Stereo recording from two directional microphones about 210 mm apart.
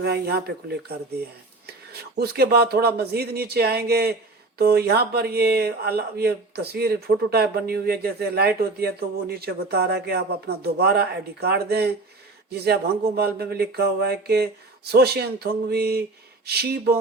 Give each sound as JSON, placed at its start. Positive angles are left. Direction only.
{"t": 0.0, "sound": "speech", "side_deg": -50}